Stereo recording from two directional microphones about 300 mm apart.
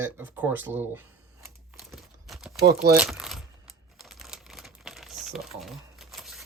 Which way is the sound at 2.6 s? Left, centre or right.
Right.